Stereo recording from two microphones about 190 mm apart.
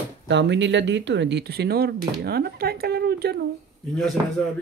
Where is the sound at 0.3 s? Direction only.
70° right (ahead or behind).